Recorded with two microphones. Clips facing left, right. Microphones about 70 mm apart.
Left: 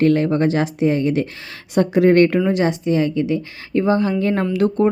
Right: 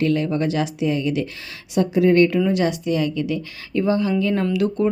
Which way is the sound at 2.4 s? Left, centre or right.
Left.